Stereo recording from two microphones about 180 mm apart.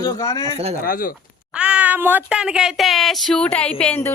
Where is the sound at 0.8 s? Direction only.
50° left (ahead or behind).